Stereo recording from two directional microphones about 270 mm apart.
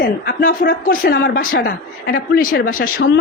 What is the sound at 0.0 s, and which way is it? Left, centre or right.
Speech, left.